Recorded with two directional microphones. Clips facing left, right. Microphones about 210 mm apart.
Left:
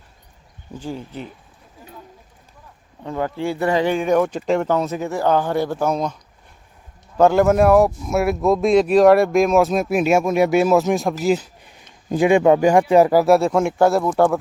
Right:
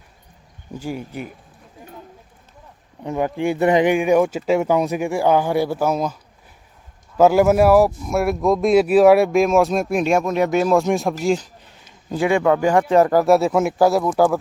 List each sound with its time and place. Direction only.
0.7 s speech: 10° right (ahead or behind)
3.0 s speech: 20° right (ahead or behind)
7.2 s speech: 5° right (ahead or behind)